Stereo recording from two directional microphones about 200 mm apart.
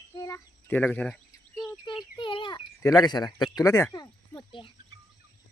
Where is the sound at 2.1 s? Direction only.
25° left (ahead or behind).